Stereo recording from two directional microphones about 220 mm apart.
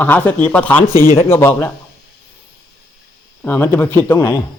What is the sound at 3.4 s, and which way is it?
Speech, 10° left (ahead or behind).